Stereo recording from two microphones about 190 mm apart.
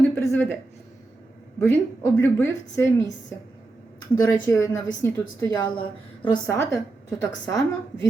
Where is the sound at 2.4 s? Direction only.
15° left (ahead or behind).